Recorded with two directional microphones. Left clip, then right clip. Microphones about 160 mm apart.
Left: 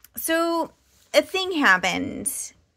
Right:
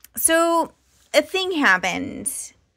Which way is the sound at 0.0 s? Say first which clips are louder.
Right 5 dB; 20° right (ahead or behind).